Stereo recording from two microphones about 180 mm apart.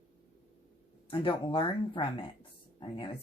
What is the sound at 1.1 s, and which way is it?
Speech, 30° left (ahead or behind).